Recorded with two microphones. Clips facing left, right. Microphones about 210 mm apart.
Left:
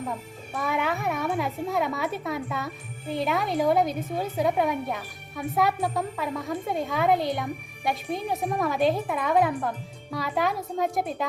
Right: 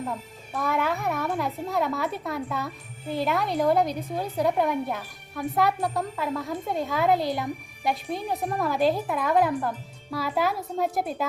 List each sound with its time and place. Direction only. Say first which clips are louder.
0.5 s a woman's voice: right 1 dB; centre (ahead or behind)